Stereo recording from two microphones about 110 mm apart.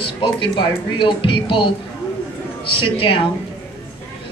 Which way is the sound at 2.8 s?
50° left (ahead or behind).